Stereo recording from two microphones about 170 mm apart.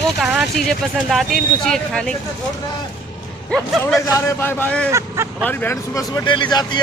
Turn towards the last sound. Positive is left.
turn(degrees=25)  # may be behind; listen again after turning